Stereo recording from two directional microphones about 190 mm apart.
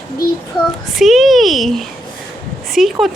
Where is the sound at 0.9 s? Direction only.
Centre (ahead or behind).